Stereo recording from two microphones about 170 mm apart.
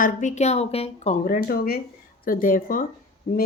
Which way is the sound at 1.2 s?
60° left (ahead or behind).